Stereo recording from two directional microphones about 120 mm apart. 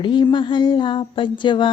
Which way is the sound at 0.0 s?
40° left (ahead or behind).